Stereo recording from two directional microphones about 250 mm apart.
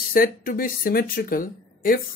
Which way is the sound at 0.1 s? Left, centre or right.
Left.